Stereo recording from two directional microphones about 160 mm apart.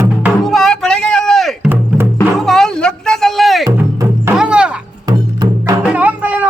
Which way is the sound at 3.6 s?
20° right (ahead or behind).